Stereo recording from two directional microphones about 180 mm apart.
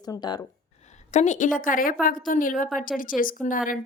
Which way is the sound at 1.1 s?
40° left (ahead or behind).